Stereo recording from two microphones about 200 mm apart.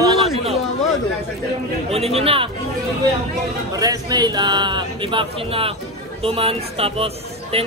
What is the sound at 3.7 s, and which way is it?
Speech, 20° right (ahead or behind).